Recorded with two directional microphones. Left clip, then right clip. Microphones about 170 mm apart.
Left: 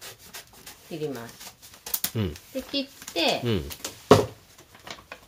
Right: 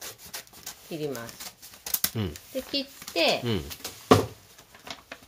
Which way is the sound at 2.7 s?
45° right (ahead or behind).